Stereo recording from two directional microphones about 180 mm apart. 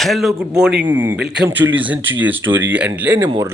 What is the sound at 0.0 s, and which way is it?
Speech, centre (ahead or behind).